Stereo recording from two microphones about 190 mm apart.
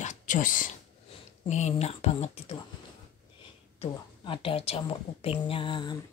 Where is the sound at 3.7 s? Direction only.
25° left (ahead or behind).